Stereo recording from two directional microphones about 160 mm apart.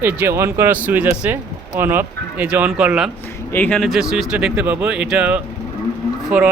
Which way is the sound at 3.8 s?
Centre (ahead or behind).